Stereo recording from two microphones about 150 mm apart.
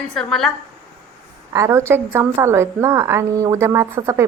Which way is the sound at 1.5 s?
20° right (ahead or behind).